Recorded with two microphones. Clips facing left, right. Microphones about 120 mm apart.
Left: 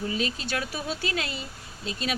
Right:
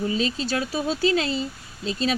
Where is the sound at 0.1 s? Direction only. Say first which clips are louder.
Right 5 dB; 25° right (ahead or behind).